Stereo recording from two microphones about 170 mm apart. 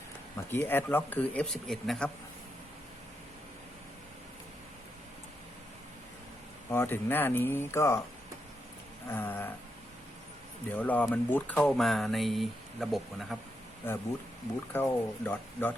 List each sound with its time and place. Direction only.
0.3 s speech: 15° left (ahead or behind)
6.7 s speech: 15° left (ahead or behind)
9.0 s speech: 10° left (ahead or behind)
10.7 s speech: 10° left (ahead or behind)
14.7 s speech: 15° left (ahead or behind)